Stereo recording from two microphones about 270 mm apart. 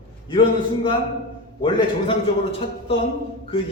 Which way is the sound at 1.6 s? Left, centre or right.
Centre.